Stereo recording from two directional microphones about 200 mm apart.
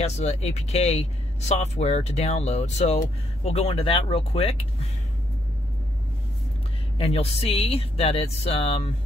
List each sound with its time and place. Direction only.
0.0 s speech: 35° left (ahead or behind)
7.0 s speech: 30° left (ahead or behind)